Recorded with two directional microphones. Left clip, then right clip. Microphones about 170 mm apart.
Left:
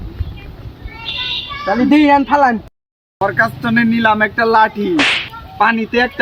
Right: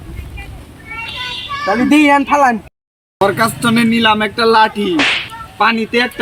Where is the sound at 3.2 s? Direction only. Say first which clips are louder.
Right 2 dB; 20° left (ahead or behind).